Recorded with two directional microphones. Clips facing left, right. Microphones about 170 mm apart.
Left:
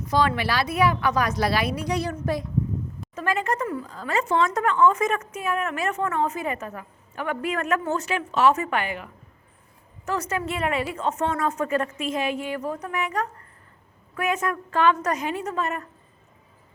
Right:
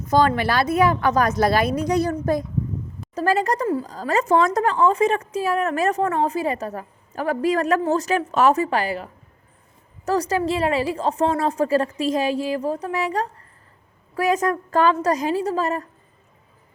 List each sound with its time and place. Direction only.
0.1 s speech: 50° right (ahead or behind)
10.1 s speech: 35° right (ahead or behind)